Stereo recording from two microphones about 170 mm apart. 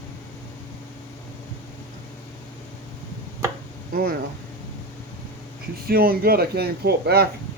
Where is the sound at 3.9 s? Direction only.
65° right (ahead or behind).